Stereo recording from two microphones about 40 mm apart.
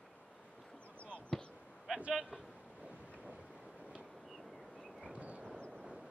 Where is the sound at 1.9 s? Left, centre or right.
Centre.